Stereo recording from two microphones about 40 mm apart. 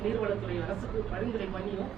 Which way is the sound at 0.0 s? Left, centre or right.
Centre.